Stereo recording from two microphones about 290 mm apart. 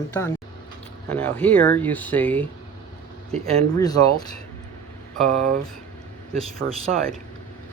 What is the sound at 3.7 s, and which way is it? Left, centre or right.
Speech, centre.